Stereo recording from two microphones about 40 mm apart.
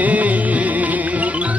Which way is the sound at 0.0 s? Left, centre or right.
Right.